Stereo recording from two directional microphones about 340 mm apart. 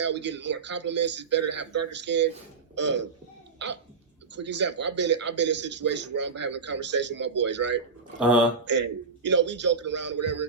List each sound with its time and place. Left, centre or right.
0.0 s a man's voice: right
4.4 s a man's voice: right
10.2 s speech: right